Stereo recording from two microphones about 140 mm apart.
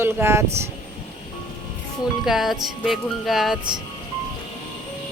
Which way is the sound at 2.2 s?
Centre (ahead or behind).